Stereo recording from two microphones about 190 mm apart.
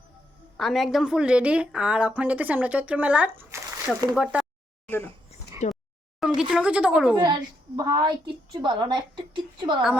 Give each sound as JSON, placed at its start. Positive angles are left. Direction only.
{"t": 0.5, "sound": "a woman's voice", "side_deg": 0}
{"t": 4.9, "sound": "speech", "side_deg": 10}
{"t": 5.6, "sound": "a sound", "side_deg": 35}
{"t": 6.1, "sound": "a sound", "side_deg": -5}
{"t": 6.5, "sound": "speech", "side_deg": -5}
{"t": 7.2, "sound": "a woman's voice", "side_deg": -20}